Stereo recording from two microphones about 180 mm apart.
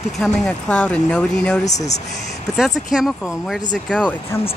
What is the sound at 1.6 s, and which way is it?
Speech, 40° left (ahead or behind).